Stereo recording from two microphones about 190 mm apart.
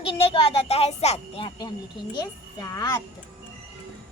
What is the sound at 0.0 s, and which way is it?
Speech, 30° left (ahead or behind).